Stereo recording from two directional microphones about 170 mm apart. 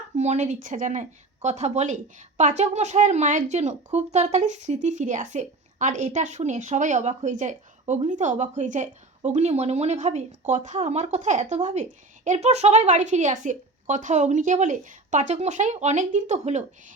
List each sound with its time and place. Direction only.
0.2 s speech: 45° right (ahead or behind)